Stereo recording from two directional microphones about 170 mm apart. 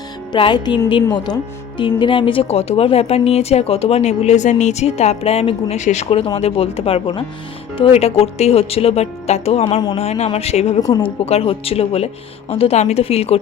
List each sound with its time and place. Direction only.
0.3 s music: 25° left (ahead or behind)
1.8 s a woman's voice: 30° left (ahead or behind)
10.8 s music: 25° left (ahead or behind)
11.3 s a woman's voice: 35° left (ahead or behind)